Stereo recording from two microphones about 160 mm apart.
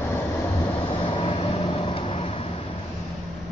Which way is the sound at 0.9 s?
35° left (ahead or behind).